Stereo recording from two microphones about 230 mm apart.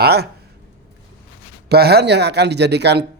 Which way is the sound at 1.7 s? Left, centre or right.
Right.